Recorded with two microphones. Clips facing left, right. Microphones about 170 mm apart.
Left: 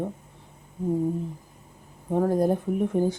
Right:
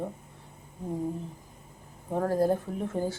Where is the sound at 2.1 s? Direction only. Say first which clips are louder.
Left 3 dB; 15° left (ahead or behind).